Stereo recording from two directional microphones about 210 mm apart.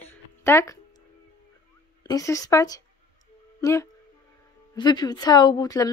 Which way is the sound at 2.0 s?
15° left (ahead or behind).